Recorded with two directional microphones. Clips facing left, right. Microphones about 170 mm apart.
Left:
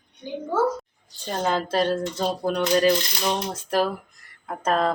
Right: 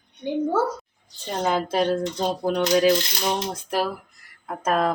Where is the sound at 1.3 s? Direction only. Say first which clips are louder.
Right 1 dB; 10° right (ahead or behind).